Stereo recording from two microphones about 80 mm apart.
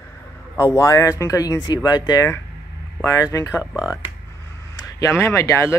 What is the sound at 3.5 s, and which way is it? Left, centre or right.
Speech, centre.